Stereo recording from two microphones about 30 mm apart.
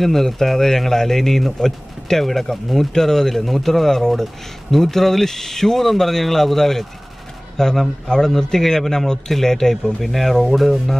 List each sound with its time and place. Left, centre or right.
0.0 s speech: centre